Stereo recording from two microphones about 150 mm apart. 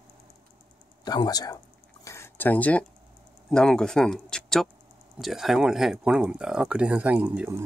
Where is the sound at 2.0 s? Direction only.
15° left (ahead or behind).